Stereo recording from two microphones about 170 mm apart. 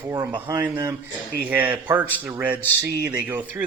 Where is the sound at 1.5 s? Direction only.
10° right (ahead or behind).